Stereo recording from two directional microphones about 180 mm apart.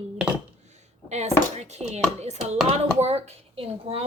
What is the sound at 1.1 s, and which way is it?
A woman's voice, 40° right (ahead or behind).